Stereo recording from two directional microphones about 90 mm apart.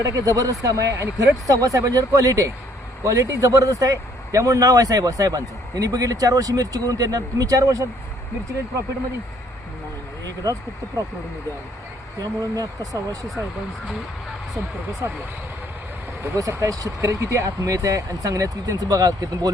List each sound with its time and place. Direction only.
0.1 s speech: 40° right (ahead or behind)
10.4 s speech: 40° right (ahead or behind)
12.1 s speech: 40° right (ahead or behind)
15.0 s speech: 30° right (ahead or behind)
16.2 s speech: 35° right (ahead or behind)